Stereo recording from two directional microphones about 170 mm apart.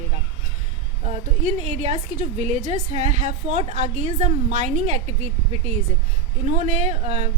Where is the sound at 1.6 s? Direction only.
40° right (ahead or behind).